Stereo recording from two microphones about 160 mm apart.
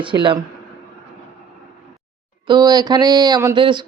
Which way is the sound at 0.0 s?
30° right (ahead or behind).